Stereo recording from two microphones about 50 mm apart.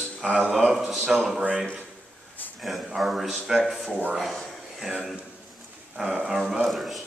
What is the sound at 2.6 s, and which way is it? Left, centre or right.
A man's voice, centre.